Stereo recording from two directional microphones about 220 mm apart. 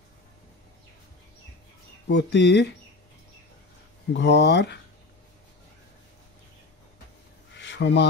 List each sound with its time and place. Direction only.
2.0 s speech: 50° left (ahead or behind)
4.1 s speech: 50° left (ahead or behind)
7.5 s a sound: 55° left (ahead or behind)